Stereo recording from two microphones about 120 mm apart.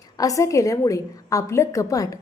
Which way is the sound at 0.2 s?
30° left (ahead or behind).